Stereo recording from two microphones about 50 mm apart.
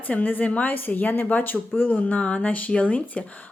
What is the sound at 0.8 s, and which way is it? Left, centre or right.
Speech, left.